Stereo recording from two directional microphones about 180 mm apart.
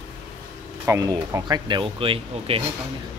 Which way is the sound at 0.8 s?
20° right (ahead or behind).